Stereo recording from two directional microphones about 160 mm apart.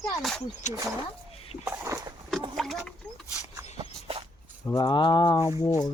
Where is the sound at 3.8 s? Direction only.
35° right (ahead or behind).